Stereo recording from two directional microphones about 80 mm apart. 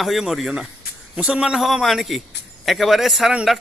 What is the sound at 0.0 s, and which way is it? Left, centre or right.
A man's voice, centre.